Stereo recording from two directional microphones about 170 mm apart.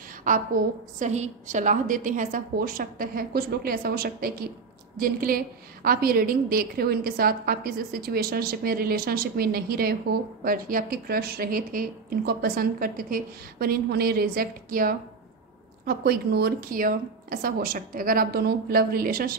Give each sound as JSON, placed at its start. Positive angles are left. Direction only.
{"t": 0.2, "sound": "a woman's voice", "side_deg": -50}